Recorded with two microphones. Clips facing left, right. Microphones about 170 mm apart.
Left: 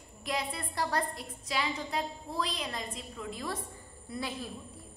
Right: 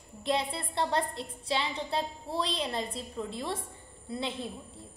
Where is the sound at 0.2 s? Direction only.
30° right (ahead or behind).